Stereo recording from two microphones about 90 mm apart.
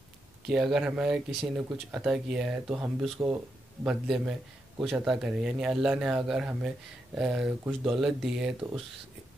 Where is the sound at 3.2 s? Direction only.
25° right (ahead or behind).